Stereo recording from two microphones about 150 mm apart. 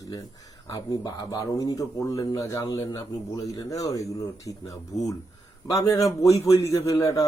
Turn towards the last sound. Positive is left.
turn(degrees=20)  # may be behind; listen again after turning